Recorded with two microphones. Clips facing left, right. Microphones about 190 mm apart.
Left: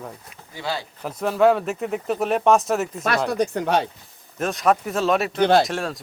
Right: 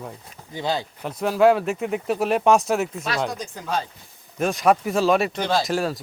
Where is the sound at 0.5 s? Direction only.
20° right (ahead or behind).